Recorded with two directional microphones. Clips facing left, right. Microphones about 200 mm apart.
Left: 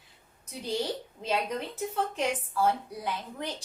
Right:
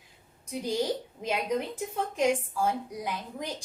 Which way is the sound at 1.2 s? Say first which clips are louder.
Even; 10° right (ahead or behind).